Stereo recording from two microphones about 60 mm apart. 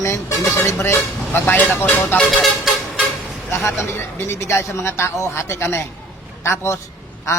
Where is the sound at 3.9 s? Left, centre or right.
Left.